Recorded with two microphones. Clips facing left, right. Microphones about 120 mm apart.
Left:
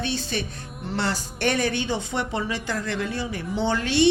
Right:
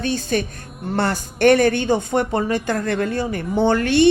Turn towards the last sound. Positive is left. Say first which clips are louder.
# right 6 dB
turn(degrees=-55)  # may be behind; listen again after turning